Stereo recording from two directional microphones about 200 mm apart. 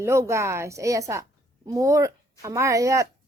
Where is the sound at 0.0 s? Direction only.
15° right (ahead or behind).